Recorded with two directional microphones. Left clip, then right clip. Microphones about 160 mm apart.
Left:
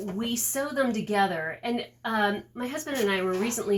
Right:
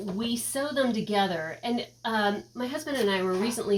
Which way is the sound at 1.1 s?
5° right (ahead or behind).